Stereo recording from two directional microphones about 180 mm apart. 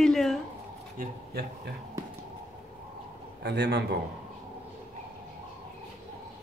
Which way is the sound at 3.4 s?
65° right (ahead or behind).